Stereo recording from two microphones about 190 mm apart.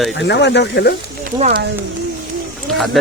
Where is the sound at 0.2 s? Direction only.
65° left (ahead or behind).